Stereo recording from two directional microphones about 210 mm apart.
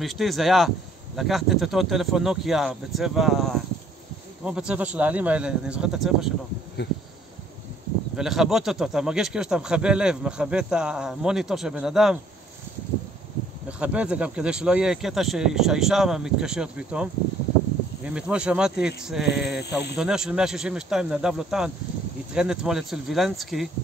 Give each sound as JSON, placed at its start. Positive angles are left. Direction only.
{"t": 0.0, "sound": "speech", "side_deg": 0}
{"t": 8.2, "sound": "speech", "side_deg": 0}
{"t": 13.7, "sound": "speech", "side_deg": -5}
{"t": 19.2, "sound": "a sound", "side_deg": 50}
{"t": 20.0, "sound": "speech", "side_deg": -5}